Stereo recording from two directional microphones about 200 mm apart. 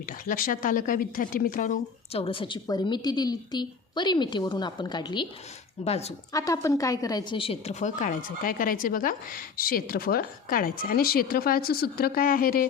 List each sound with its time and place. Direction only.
0.0 s a woman's voice: 45° left (ahead or behind)
2.2 s a woman's voice: 25° left (ahead or behind)
6.3 s a woman's voice: 15° left (ahead or behind); by 12.6 s 45° left (ahead or behind)